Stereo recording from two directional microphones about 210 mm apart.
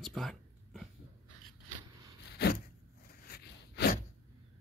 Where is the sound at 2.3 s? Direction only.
50° left (ahead or behind).